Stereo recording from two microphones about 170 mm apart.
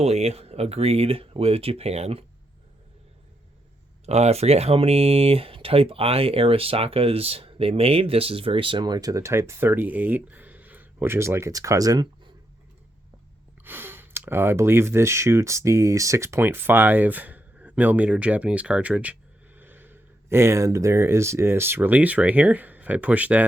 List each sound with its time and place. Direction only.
0.0 s speech: 40° right (ahead or behind)
4.0 s speech: 40° right (ahead or behind); by 12.3 s 20° right (ahead or behind)
13.7 s speech: 10° right (ahead or behind)